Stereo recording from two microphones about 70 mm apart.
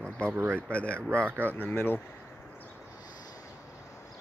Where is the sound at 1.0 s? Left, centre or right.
Right.